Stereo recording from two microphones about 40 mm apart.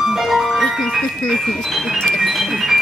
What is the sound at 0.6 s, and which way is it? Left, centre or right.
Music, centre.